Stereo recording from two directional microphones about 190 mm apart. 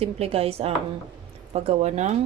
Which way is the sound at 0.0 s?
35° right (ahead or behind).